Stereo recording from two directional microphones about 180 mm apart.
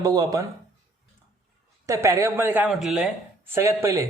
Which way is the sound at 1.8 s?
15° right (ahead or behind).